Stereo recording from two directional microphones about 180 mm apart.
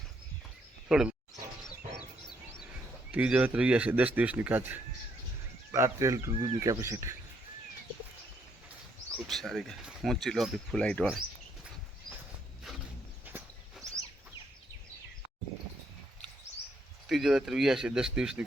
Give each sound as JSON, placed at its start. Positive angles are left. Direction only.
{"t": 0.9, "sound": "speech", "side_deg": -5}
{"t": 3.1, "sound": "a man's voice", "side_deg": -5}
{"t": 9.1, "sound": "speech", "side_deg": 0}
{"t": 13.3, "sound": "walk", "side_deg": -10}
{"t": 17.1, "sound": "speech", "side_deg": 0}